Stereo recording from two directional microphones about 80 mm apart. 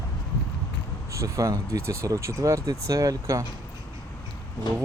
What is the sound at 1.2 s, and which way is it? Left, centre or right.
Speech, right.